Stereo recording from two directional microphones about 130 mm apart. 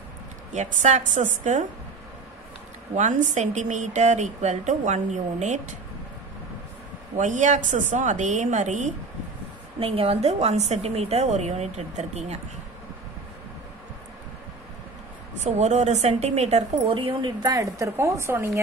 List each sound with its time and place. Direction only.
0.5 s a woman's voice: 70° right (ahead or behind)
3.0 s speech: 70° right (ahead or behind)
7.2 s a woman's voice: 70° right (ahead or behind)
9.8 s speech: 45° right (ahead or behind)
15.4 s speech: 60° right (ahead or behind)
16.9 s a woman's voice: 40° right (ahead or behind); by 18.6 s 20° right (ahead or behind)